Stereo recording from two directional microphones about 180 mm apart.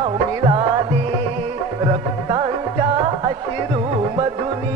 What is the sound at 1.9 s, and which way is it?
Music, 30° right (ahead or behind).